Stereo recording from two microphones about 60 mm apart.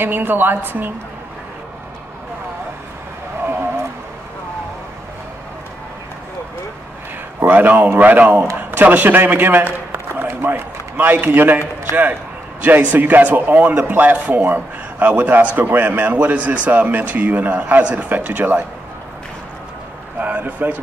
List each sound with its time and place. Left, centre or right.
0.0 s speech: right
7.4 s a man's voice: right
20.2 s a man's voice: right